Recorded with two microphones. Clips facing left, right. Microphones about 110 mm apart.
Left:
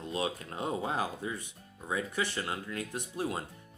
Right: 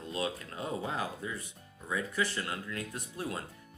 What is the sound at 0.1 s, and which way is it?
Speech, 25° left (ahead or behind).